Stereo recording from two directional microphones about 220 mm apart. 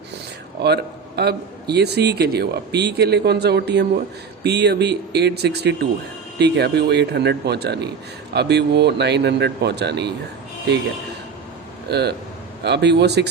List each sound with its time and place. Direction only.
0.6 s a man's voice: 50° right (ahead or behind)
11.9 s speech: 50° right (ahead or behind)